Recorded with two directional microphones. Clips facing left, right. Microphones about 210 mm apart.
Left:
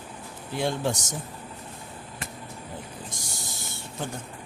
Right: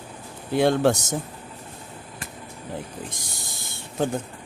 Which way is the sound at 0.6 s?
65° right (ahead or behind).